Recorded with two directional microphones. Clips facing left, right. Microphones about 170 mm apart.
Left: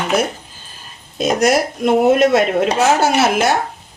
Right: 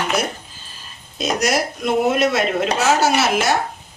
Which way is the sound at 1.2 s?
50° left (ahead or behind).